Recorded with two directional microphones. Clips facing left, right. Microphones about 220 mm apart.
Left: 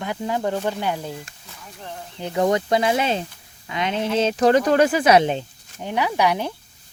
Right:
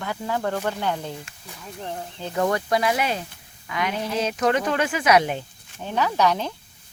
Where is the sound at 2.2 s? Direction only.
20° left (ahead or behind).